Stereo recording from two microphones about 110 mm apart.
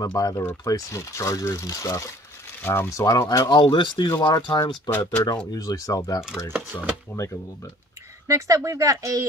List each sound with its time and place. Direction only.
0.0 s speech: 35° left (ahead or behind)
4.9 s speech: 15° left (ahead or behind)
5.5 s speech: 35° left (ahead or behind)
8.3 s speech: 30° right (ahead or behind)